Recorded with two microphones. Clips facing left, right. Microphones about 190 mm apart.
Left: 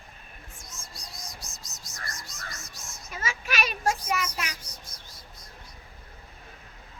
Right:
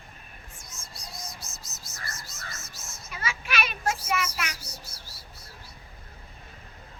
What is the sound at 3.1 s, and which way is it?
Child singing, 45° left (ahead or behind).